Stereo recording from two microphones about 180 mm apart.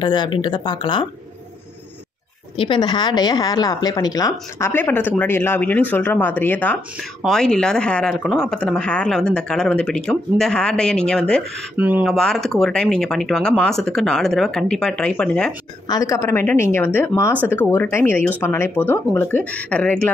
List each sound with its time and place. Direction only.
0.0 s speech: 25° left (ahead or behind)
2.5 s speech: 30° left (ahead or behind); by 11.4 s 5° left (ahead or behind)
11.7 s speech: 10° right (ahead or behind)
15.9 s speech: 15° left (ahead or behind)